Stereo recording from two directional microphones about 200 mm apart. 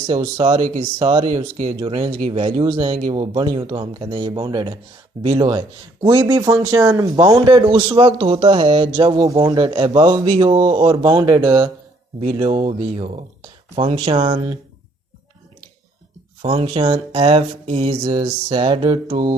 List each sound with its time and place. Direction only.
0.1 s speech: 25° right (ahead or behind)
16.4 s speech: 25° right (ahead or behind)